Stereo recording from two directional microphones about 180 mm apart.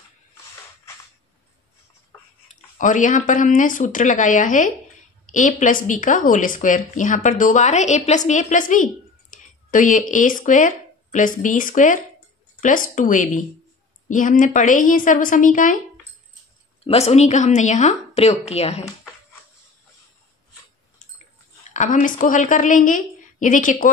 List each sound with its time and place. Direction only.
2.4 s a woman's voice: 45° left (ahead or behind)
16.8 s a woman's voice: 35° left (ahead or behind)
21.7 s speech: 45° left (ahead or behind)